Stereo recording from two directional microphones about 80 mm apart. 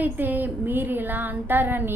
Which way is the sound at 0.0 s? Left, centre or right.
Right.